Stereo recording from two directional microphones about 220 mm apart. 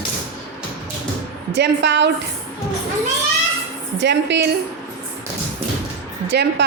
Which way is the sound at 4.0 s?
50° right (ahead or behind).